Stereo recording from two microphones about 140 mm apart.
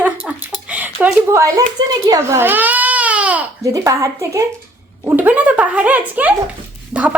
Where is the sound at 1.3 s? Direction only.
20° right (ahead or behind).